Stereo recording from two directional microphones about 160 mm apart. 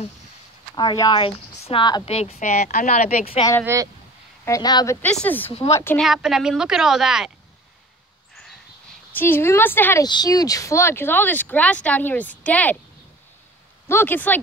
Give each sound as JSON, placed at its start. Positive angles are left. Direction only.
{"t": 0.7, "sound": "speech", "side_deg": 25}
{"t": 2.0, "sound": "speech", "side_deg": 40}
{"t": 3.6, "sound": "speech", "side_deg": -20}
{"t": 4.5, "sound": "speech", "side_deg": 25}
{"t": 5.0, "sound": "speech", "side_deg": 10}
{"t": 5.9, "sound": "a woman's voice", "side_deg": 0}
{"t": 9.1, "sound": "speech", "side_deg": 15}
{"t": 10.0, "sound": "speech", "side_deg": 25}
{"t": 13.8, "sound": "speech", "side_deg": 15}